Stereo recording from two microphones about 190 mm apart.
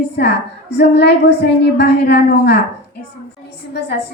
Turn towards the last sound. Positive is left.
turn(degrees=60)  # may be behind; listen again after turning